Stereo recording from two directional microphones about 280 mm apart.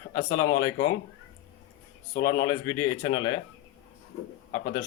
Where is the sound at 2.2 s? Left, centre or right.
Centre.